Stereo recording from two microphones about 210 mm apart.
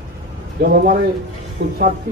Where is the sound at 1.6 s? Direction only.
50° right (ahead or behind).